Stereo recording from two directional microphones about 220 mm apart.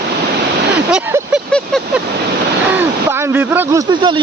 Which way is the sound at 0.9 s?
5° right (ahead or behind).